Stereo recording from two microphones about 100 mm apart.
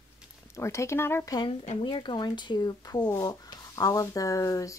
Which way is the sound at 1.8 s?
50° left (ahead or behind).